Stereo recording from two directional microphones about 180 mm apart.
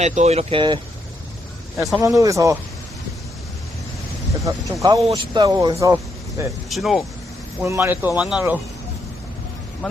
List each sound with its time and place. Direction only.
0.0 s speech: 40° right (ahead or behind)
2.0 s speech: 20° right (ahead or behind)
4.4 s speech: 20° right (ahead or behind)
6.7 s speech: centre (ahead or behind)
7.6 s speech: 15° right (ahead or behind)
9.8 s speech: centre (ahead or behind)